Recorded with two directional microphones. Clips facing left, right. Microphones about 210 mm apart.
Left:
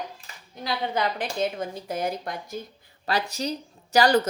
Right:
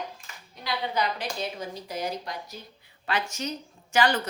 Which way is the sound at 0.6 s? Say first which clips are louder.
Left 2 dB; 50° left (ahead or behind).